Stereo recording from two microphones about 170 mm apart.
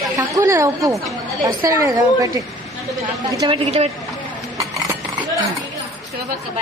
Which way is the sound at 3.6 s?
40° right (ahead or behind).